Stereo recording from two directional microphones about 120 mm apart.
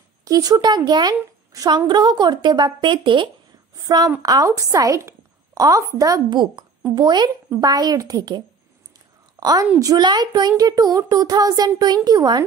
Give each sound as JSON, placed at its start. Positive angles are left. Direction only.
{"t": 0.2, "sound": "a woman's voice", "side_deg": -30}
{"t": 3.7, "sound": "a woman's voice", "side_deg": -30}
{"t": 6.3, "sound": "a woman's voice", "side_deg": -40}
{"t": 7.4, "sound": "a woman's voice", "side_deg": -20}